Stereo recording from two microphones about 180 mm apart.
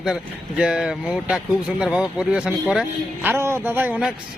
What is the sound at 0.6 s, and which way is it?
A man's voice, 5° right (ahead or behind).